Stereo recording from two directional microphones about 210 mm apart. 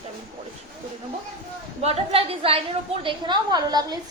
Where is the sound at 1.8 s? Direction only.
30° right (ahead or behind).